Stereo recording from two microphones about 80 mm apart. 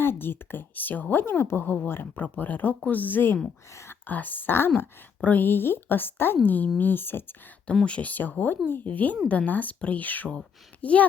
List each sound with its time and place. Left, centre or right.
0.0 s speech: left
3.7 s speech: left
4.0 s speech: left
7.9 s speech: centre